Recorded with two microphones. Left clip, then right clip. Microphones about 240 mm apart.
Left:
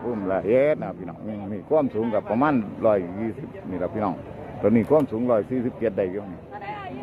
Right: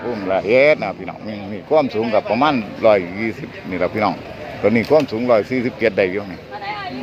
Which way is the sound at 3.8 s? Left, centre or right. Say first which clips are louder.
Right 8 dB; right.